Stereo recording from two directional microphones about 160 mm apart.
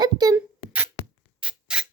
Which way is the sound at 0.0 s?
25° right (ahead or behind).